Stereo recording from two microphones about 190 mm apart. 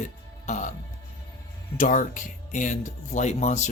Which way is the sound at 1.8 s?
45° left (ahead or behind).